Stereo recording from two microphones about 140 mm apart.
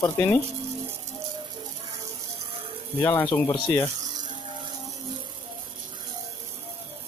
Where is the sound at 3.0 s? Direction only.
15° left (ahead or behind).